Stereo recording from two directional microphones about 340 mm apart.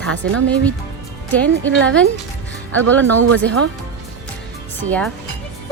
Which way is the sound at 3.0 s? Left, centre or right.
Right.